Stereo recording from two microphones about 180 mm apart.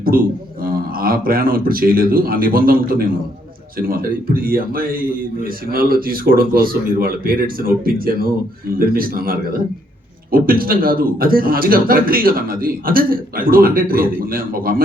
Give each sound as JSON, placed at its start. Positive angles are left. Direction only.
{"t": 0.0, "sound": "a man's voice", "side_deg": -55}